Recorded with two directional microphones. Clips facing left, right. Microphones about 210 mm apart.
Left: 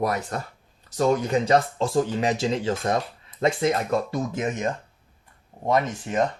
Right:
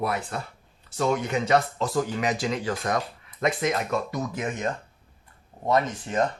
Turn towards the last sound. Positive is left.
turn(degrees=15)  # may be behind; listen again after turning